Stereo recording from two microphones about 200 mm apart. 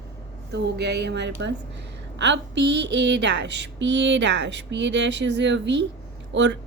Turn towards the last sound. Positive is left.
turn(degrees=-65)  # may be behind; listen again after turning